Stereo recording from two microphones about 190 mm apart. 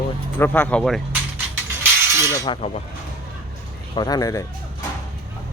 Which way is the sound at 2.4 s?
30° left (ahead or behind).